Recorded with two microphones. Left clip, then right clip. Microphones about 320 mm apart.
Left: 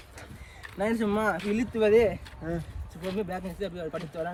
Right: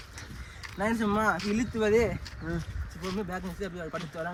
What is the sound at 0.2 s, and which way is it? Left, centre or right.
Speech, centre.